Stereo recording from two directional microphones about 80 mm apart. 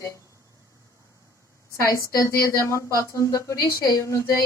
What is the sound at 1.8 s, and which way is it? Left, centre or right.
Speech, left.